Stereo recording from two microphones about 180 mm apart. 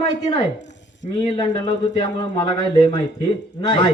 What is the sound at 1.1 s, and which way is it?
Speech, 25° left (ahead or behind).